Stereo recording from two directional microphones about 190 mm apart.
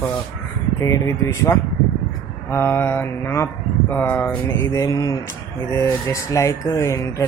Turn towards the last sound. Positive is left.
turn(degrees=15)  # may be behind; listen again after turning